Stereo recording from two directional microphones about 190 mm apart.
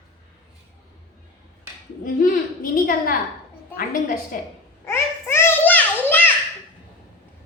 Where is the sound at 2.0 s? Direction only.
45° left (ahead or behind).